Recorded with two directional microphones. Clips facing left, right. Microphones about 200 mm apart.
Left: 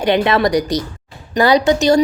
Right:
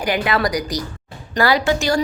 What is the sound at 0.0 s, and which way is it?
A woman's voice, 25° left (ahead or behind).